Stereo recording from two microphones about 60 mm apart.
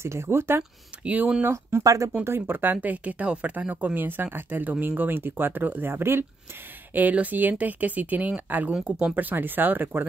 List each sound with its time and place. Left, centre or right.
0.0 s speech: right
1.0 s speech: right
1.8 s speech: right
2.2 s speech: right
6.9 s speech: right